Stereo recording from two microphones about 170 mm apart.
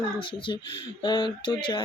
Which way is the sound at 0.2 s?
30° left (ahead or behind).